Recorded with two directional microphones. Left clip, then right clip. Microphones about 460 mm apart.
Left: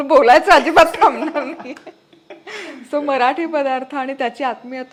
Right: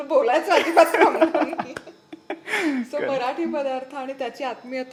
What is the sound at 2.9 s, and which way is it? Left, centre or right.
A woman's voice, left.